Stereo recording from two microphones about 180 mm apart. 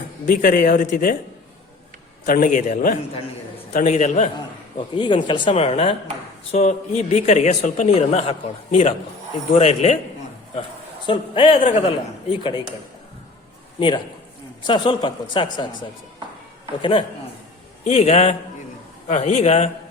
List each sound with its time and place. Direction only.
0.3 s a man's voice: 50° left (ahead or behind)
2.2 s a man's voice: 45° left (ahead or behind)
4.9 s a man's voice: 25° left (ahead or behind)
11.0 s speech: 30° left (ahead or behind)
13.7 s a man's voice: 30° left (ahead or behind)
17.8 s a man's voice: 35° left (ahead or behind)